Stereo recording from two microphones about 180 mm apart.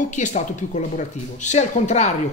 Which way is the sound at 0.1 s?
45° left (ahead or behind).